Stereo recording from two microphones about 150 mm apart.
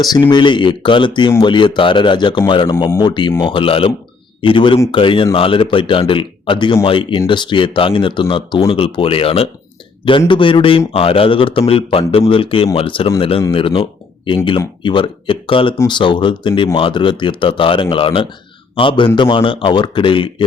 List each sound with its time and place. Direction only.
0.0 s speech: 25° left (ahead or behind)